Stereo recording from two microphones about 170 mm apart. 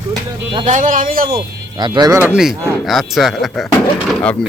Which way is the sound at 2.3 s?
5° right (ahead or behind).